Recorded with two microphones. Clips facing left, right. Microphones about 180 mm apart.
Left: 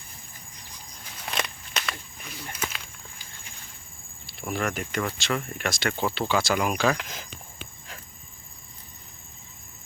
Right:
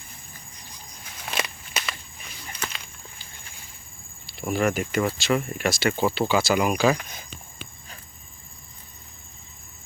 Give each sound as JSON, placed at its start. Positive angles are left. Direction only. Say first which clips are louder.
{"t": 1.3, "sound": "walk", "louder": "right 1 dB", "side_deg": -5}
{"t": 2.5, "sound": "a sound", "louder": "even", "side_deg": 5}
{"t": 4.3, "sound": "speech", "louder": "right 5 dB", "side_deg": 0}
{"t": 6.9, "sound": "speech", "louder": "right 2 dB", "side_deg": 90}